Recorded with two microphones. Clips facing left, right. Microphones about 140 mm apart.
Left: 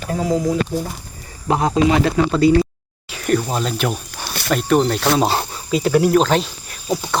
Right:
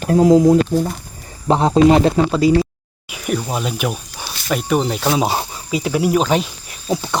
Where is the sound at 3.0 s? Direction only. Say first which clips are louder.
Left 3 dB; 10° right (ahead or behind).